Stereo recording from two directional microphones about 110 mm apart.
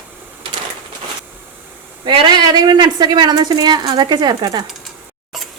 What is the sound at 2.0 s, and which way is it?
A woman's voice, 45° right (ahead or behind).